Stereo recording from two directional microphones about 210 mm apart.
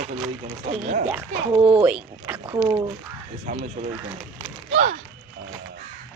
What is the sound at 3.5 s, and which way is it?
Speech, 35° right (ahead or behind).